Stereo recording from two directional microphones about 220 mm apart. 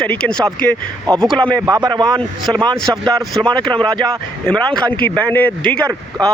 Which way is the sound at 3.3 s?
5° left (ahead or behind).